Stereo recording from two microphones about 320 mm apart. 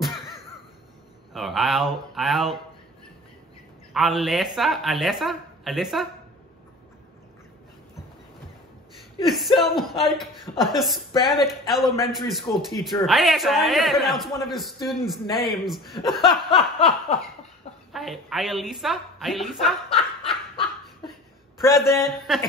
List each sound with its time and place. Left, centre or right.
1.3 s a man's voice: centre
3.9 s a man's voice: centre
9.2 s a man's voice: centre
16.5 s snicker: centre
17.9 s a man's voice: centre
21.5 s a man's voice: centre